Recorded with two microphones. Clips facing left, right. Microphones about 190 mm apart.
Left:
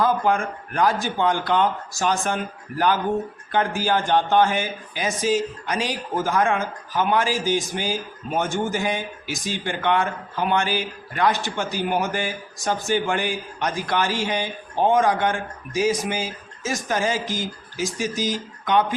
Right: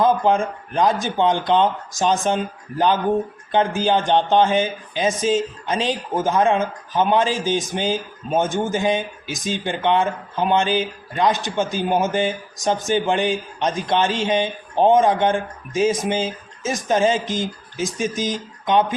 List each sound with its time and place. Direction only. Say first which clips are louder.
0.0 s speech: right 3 dB; 20° right (ahead or behind)